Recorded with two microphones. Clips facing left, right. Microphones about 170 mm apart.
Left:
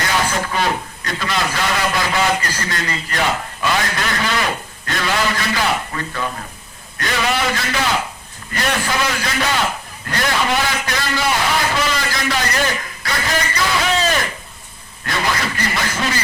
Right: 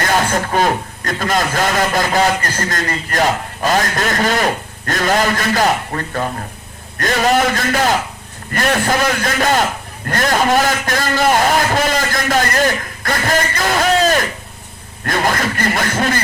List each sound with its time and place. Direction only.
0.0 s a man's voice: 50° right (ahead or behind)